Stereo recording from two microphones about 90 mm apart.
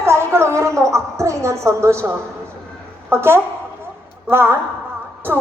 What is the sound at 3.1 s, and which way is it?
Speech, 25° right (ahead or behind).